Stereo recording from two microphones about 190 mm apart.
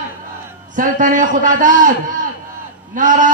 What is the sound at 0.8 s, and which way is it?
A man's voice, 45° right (ahead or behind).